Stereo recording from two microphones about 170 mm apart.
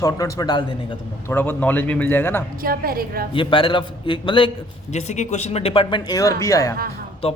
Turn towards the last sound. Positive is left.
turn(degrees=35)  # may be behind; listen again after turning